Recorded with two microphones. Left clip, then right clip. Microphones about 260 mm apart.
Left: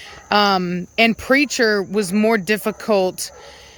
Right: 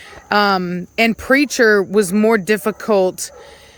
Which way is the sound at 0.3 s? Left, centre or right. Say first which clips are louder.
Right 1 dB; centre.